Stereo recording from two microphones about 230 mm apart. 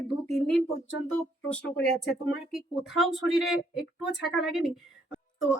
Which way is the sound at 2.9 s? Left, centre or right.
Centre.